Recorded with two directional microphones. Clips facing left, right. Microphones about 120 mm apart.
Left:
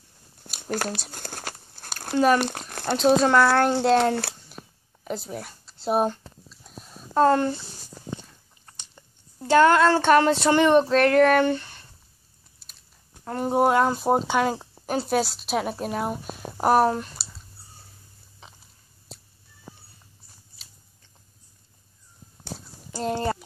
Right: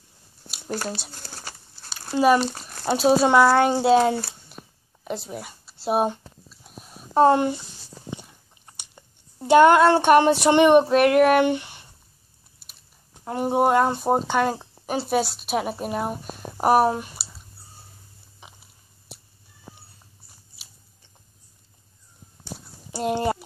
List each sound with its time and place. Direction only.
0.7 s speech: 55° left (ahead or behind)
1.1 s a sound: 55° left (ahead or behind)
2.3 s speech: 55° left (ahead or behind)
2.8 s speech: 10° right (ahead or behind)
4.1 s speech: 65° left (ahead or behind)
5.0 s speech: centre (ahead or behind)
6.6 s a sound: 5° right (ahead or behind)
7.2 s speech: 15° right (ahead or behind)
8.2 s chewing: 15° right (ahead or behind)
10.4 s speech: 15° right (ahead or behind)
13.2 s speech: 15° right (ahead or behind)
13.5 s speech: centre (ahead or behind)
22.8 s a sound: 15° right (ahead or behind)